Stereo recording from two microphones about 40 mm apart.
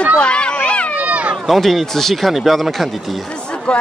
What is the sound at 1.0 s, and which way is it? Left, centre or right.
Run, right.